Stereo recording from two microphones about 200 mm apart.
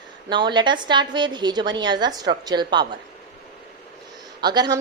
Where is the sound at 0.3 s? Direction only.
25° right (ahead or behind).